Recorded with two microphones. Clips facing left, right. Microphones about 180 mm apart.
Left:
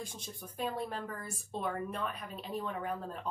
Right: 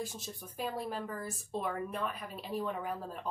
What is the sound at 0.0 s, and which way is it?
Speech, 5° right (ahead or behind).